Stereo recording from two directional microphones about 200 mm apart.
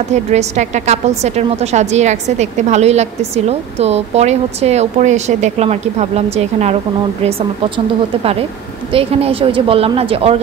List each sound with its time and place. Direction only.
0.1 s a woman's voice: 35° right (ahead or behind)